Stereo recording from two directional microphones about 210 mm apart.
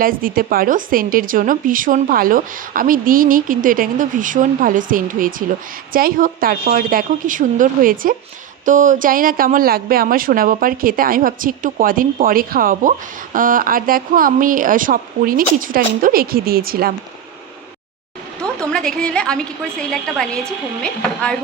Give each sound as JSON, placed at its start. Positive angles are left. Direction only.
{"t": 0.0, "sound": "a woman's voice", "side_deg": -40}
{"t": 18.3, "sound": "a sound", "side_deg": 5}
{"t": 19.9, "sound": "a woman's voice", "side_deg": 5}